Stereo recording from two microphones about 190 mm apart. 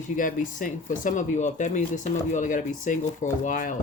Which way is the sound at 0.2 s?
45° left (ahead or behind).